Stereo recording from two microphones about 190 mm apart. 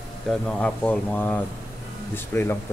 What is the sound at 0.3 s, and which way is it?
Speech, 5° left (ahead or behind).